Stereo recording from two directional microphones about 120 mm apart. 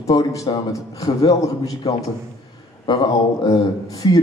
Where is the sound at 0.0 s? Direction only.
30° left (ahead or behind).